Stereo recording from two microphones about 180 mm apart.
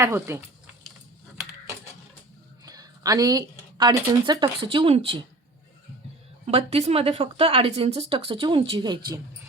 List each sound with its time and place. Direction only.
0.0 s speech: 15° right (ahead or behind)
2.6 s speech: 20° right (ahead or behind)
6.4 s speech: 35° right (ahead or behind)